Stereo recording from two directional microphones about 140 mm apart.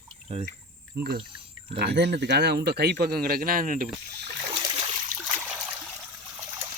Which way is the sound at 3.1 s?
90° right.